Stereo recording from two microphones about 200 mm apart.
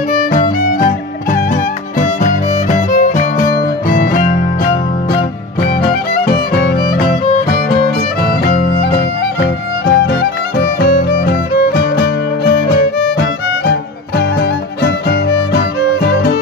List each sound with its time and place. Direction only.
0.1 s music: 40° left (ahead or behind)
5.6 s music: 50° left (ahead or behind)
8.2 s music: 50° left (ahead or behind)